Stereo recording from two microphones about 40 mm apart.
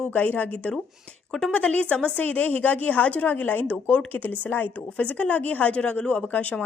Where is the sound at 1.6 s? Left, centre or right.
Left.